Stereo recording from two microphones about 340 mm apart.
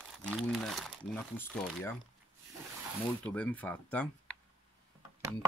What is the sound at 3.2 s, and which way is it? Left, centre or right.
Speech, centre.